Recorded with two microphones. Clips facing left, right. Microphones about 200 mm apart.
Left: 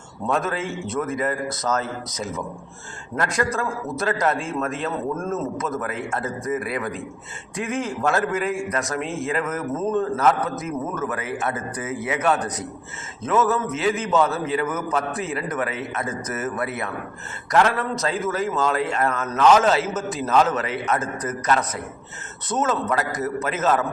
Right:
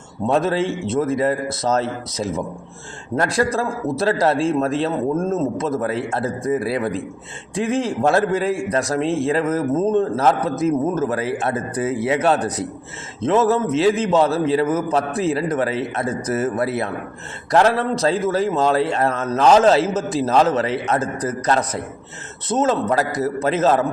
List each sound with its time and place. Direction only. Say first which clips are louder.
0.3 s a man's voice: right 6 dB; 30° right (ahead or behind)